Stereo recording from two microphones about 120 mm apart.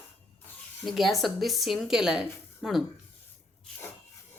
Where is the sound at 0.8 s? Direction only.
Centre (ahead or behind).